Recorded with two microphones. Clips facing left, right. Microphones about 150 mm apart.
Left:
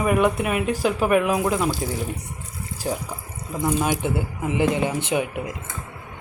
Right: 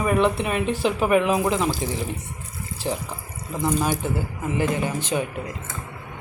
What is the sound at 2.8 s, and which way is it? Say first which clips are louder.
Speech: even; 10° left (ahead or behind).